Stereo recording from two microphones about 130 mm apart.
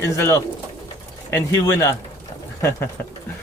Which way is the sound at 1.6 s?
20° left (ahead or behind).